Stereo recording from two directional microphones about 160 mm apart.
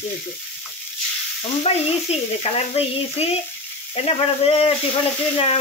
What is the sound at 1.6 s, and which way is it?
Speech, 40° left (ahead or behind).